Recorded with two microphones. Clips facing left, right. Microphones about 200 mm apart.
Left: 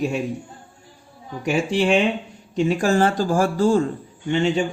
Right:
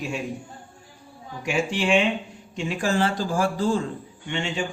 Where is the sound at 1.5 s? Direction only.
40° left (ahead or behind).